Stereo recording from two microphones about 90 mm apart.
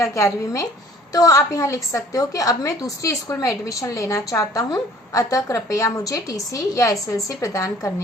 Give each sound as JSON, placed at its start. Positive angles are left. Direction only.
{"t": 0.0, "sound": "a woman's voice", "side_deg": 35}